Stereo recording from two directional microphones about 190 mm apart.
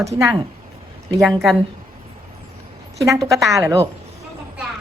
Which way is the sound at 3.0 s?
15° right (ahead or behind).